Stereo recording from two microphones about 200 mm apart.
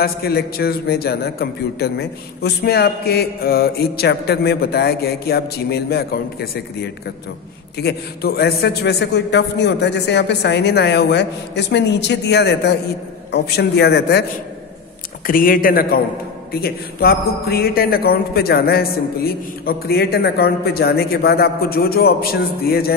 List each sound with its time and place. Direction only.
0.0 s a man's voice: 50° left (ahead or behind)
7.7 s a man's voice: 50° left (ahead or behind)
15.2 s a man's voice: 45° left (ahead or behind)